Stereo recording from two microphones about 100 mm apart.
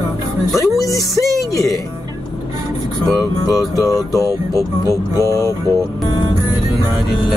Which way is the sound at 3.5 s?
35° left (ahead or behind).